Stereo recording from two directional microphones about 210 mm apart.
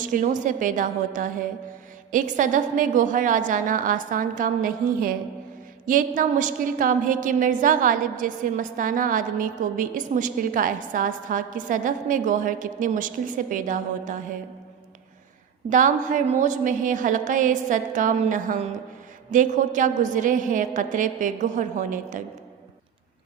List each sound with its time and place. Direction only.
0.0 s a woman's voice: 40° right (ahead or behind)
15.7 s a woman's voice: 40° right (ahead or behind)